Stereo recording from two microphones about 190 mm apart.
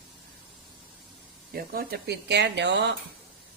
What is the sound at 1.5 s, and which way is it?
A woman's voice, 55° right (ahead or behind).